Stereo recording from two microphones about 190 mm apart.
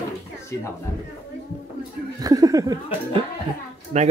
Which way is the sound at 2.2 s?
20° right (ahead or behind).